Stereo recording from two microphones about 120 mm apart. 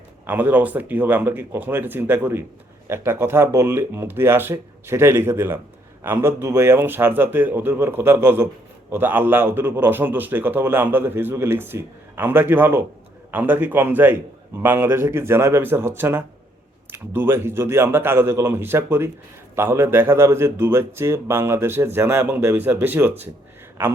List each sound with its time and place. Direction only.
0.3 s a man's voice: 15° right (ahead or behind)